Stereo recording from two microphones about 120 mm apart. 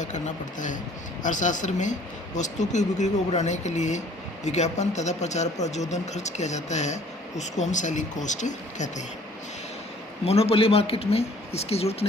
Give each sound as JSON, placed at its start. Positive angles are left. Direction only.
{"t": 0.0, "sound": "speech", "side_deg": 90}
{"t": 10.2, "sound": "speech", "side_deg": 55}